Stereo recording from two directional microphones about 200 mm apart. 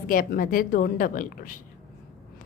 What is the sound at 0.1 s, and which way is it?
A woman's voice, 45° left (ahead or behind).